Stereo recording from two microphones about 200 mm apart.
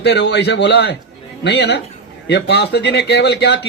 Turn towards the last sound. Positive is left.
turn(degrees=60)  # may be behind; listen again after turning